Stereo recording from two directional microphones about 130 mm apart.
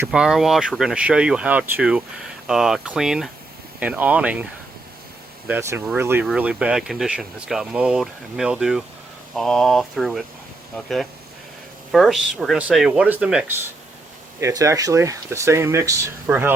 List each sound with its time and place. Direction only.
0.1 s speech: 5° right (ahead or behind)
5.5 s speech: 20° right (ahead or behind)
14.4 s speech: 25° right (ahead or behind)